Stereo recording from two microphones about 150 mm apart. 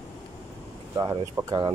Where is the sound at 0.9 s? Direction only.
20° right (ahead or behind).